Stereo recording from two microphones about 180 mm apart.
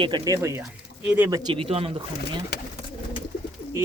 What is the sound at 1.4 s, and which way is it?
Speech, 25° right (ahead or behind).